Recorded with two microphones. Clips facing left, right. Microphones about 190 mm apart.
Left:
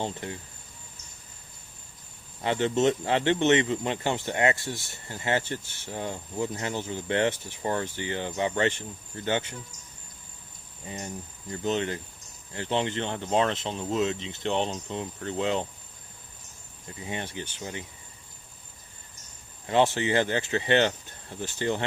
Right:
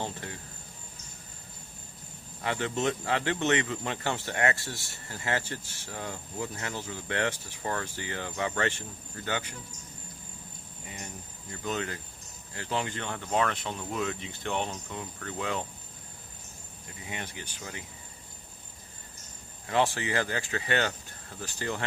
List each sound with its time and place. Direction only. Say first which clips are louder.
0.0 s speech: left 4 dB; 20° left (ahead or behind)
2.4 s speech: left 6 dB; 25° left (ahead or behind)
10.8 s speech: left 7 dB; 35° left (ahead or behind)
17.0 s speech: left 6 dB; 30° left (ahead or behind)
19.6 s speech: left 4 dB; 20° left (ahead or behind)